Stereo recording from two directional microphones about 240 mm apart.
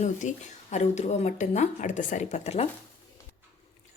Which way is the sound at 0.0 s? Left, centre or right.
Left.